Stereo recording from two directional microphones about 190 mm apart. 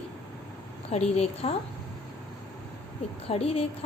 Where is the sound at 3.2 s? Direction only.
30° left (ahead or behind).